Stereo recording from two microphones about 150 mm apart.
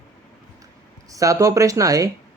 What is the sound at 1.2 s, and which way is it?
Speech, 20° right (ahead or behind).